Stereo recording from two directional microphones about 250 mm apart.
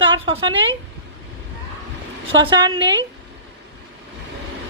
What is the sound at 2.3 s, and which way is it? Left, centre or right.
Speech, centre.